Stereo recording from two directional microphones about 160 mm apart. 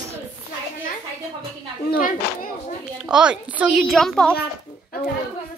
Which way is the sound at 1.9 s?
60° left (ahead or behind).